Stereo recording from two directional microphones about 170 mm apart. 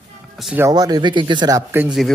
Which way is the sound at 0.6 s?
20° right (ahead or behind).